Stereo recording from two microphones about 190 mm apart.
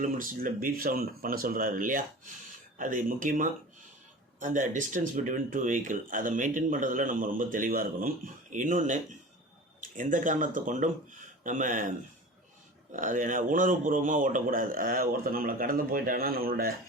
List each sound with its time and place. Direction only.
0.0 s speech: 45° right (ahead or behind)